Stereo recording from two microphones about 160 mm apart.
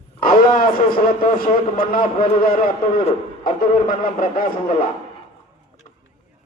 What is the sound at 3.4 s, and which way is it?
Speech, 65° left (ahead or behind).